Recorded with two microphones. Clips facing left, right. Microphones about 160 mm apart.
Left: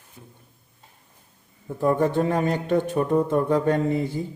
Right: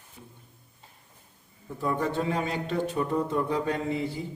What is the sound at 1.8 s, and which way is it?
Speech, 50° left (ahead or behind).